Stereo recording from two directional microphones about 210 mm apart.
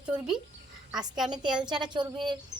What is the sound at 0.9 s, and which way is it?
Speech, centre (ahead or behind).